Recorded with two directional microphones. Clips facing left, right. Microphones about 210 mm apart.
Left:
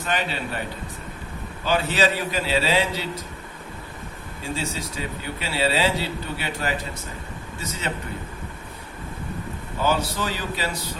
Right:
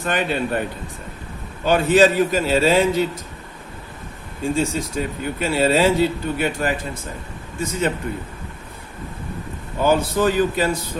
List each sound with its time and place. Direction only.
0.0 s a man's voice: 50° right (ahead or behind)
1.6 s a man's voice: 50° right (ahead or behind)
4.5 s a man's voice: 50° right (ahead or behind)
9.8 s a man's voice: 50° right (ahead or behind)